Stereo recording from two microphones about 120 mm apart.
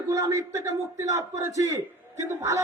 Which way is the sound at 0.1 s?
25° right (ahead or behind).